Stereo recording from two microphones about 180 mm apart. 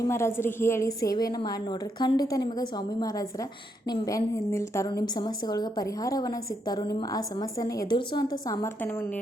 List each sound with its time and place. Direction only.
0.1 s a woman's voice: 15° left (ahead or behind)